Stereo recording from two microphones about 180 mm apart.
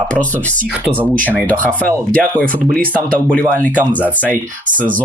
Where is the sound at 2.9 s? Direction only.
10° left (ahead or behind).